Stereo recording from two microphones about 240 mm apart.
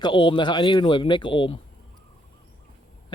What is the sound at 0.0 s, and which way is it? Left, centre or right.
Speech, left.